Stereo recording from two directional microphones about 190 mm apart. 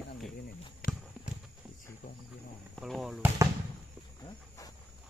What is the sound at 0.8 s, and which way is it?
Clip-clop, 50° left (ahead or behind).